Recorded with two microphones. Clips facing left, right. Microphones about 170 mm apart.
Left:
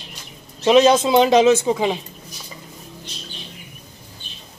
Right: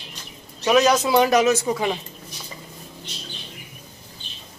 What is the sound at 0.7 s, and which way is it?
Speech, 25° left (ahead or behind).